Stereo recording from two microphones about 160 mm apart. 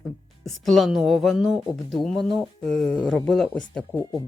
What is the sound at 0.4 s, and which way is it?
Speech, centre (ahead or behind).